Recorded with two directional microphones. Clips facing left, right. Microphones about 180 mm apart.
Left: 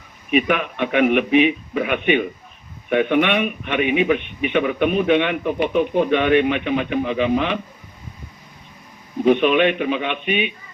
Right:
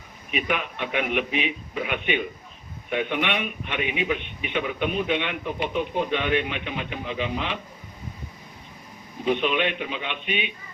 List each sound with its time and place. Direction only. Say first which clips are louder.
0.3 s a man's voice: left 9 dB; 60° left (ahead or behind)
9.2 s a man's voice: left 8 dB; 55° left (ahead or behind)